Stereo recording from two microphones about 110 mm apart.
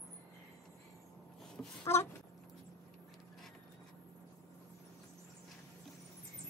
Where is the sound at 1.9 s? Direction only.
20° left (ahead or behind).